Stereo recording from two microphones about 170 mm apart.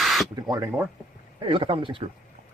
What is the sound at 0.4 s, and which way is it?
Speech, 20° right (ahead or behind).